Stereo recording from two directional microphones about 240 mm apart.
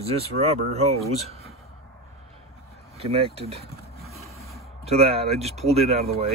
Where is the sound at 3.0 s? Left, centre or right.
Right.